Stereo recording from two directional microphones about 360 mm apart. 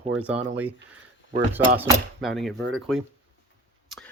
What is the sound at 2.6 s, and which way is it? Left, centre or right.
Speech, right.